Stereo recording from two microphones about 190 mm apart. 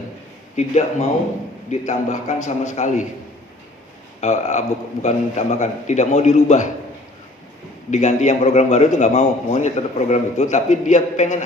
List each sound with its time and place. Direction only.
0.5 s a man's voice: 35° left (ahead or behind)
4.2 s a man's voice: 40° left (ahead or behind)
7.9 s a man's voice: 40° left (ahead or behind)